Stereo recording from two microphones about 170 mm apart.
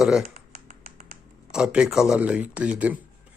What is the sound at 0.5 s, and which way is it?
Finger snapping, 45° right (ahead or behind).